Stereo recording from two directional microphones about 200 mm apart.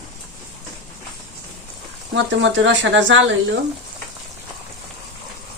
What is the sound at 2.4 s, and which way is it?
Speech, 65° right (ahead or behind).